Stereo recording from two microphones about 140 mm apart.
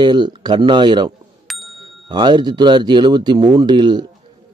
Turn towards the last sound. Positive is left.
turn(degrees=-30)  # may be behind; listen again after turning